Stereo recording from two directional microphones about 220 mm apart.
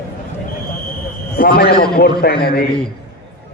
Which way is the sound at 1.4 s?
45° left (ahead or behind).